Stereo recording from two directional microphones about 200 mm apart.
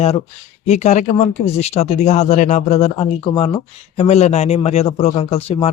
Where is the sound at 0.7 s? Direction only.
35° left (ahead or behind).